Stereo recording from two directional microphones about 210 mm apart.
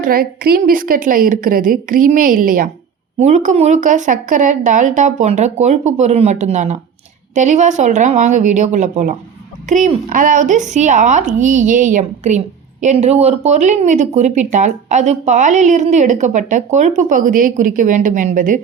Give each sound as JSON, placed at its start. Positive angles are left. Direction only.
{"t": 0.0, "sound": "speech", "side_deg": -45}